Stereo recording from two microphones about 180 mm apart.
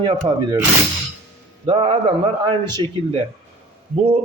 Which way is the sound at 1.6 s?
30° right (ahead or behind).